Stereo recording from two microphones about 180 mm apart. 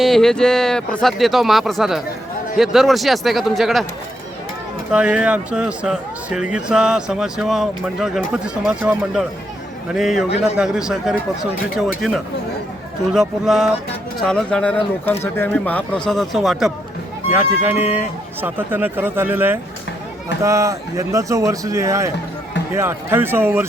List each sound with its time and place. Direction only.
0.0 s speech: centre (ahead or behind)
4.9 s speech: 5° right (ahead or behind)